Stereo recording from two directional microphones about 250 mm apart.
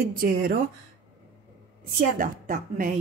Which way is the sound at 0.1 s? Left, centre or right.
Right.